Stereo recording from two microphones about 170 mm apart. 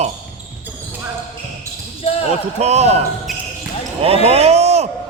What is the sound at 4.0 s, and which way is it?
Speech, 35° right (ahead or behind).